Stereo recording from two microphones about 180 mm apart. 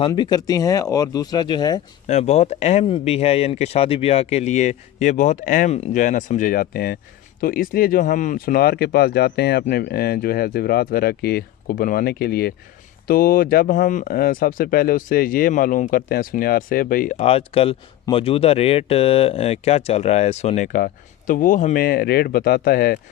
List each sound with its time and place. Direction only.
0.1 s speech: 20° left (ahead or behind)
2.0 s speech: 40° left (ahead or behind)
17.2 s speech: 30° left (ahead or behind)
20.7 s speech: 50° left (ahead or behind)